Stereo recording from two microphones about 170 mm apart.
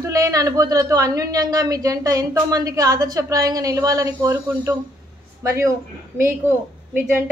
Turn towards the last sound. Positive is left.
turn(degrees=-10)  # may be behind; listen again after turning